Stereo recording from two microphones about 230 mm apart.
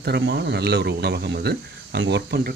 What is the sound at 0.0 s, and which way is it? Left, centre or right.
Speech, right.